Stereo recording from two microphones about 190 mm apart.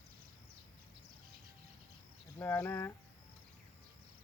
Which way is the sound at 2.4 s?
15° left (ahead or behind).